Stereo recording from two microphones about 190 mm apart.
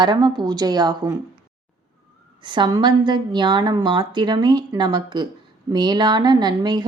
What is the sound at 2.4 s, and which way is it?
Speech, 25° right (ahead or behind).